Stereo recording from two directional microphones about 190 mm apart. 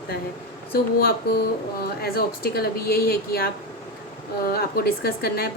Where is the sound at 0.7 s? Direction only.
55° left (ahead or behind).